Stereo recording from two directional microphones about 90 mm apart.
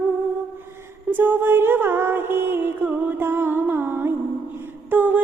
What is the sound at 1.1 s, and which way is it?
Music, 25° right (ahead or behind).